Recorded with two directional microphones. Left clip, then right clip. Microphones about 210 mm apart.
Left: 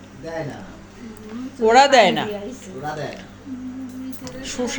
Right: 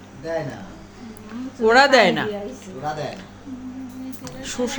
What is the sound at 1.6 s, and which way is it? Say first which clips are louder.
Speech: left 1 dB; 15° right (ahead or behind).